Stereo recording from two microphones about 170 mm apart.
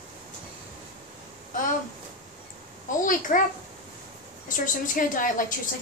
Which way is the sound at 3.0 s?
50° left (ahead or behind).